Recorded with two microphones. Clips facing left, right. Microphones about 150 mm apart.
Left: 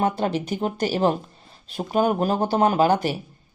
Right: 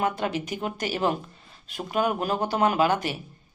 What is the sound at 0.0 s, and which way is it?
A woman's voice, 30° left (ahead or behind).